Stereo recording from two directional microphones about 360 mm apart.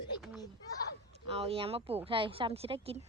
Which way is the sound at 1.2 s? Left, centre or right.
Centre.